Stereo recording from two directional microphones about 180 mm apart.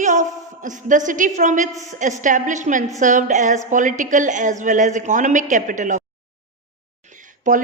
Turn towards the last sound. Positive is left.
turn(degrees=-45)  # may be behind; listen again after turning